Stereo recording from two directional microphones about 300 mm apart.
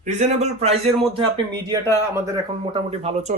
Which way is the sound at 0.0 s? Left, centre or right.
Right.